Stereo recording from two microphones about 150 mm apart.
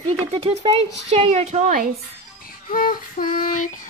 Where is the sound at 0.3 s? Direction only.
40° right (ahead or behind); by 1.9 s 60° right (ahead or behind).